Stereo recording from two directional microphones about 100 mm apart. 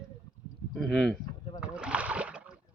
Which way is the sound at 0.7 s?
Centre (ahead or behind).